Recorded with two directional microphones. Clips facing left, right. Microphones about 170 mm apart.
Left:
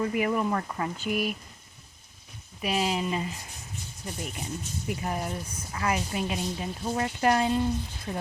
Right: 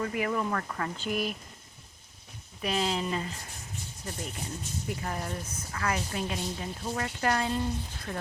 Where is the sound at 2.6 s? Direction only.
10° left (ahead or behind).